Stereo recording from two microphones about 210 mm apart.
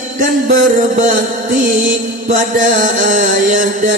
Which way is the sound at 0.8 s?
35° right (ahead or behind).